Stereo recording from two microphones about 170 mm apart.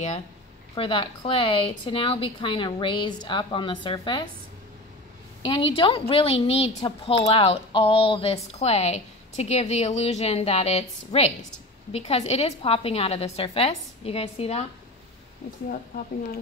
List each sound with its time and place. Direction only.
0.7 s a woman's voice: 30° left (ahead or behind)
5.4 s a woman's voice: 30° left (ahead or behind)